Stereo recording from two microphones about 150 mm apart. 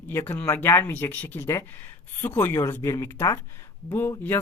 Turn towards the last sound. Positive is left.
turn(degrees=15)  # may be behind; listen again after turning